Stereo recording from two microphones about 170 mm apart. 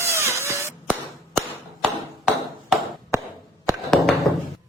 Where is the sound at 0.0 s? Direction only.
15° right (ahead or behind).